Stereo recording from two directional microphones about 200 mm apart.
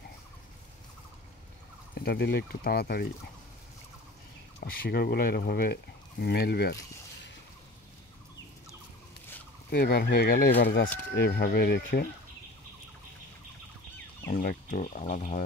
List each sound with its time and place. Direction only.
2.0 s speech: 50° left (ahead or behind)
4.6 s speech: 50° left (ahead or behind)
9.7 s speech: 55° left (ahead or behind)
14.2 s speech: 40° left (ahead or behind)